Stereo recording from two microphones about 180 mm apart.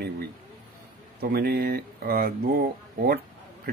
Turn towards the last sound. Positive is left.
turn(degrees=-55)  # may be behind; listen again after turning